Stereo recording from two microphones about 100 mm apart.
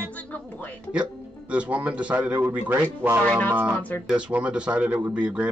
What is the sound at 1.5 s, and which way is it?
Speech, 15° right (ahead or behind).